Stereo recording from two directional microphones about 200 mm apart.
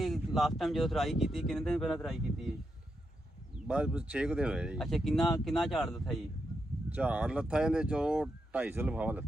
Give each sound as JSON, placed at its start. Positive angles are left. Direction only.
{"t": 0.0, "sound": "speech", "side_deg": 0}
{"t": 3.7, "sound": "speech", "side_deg": -5}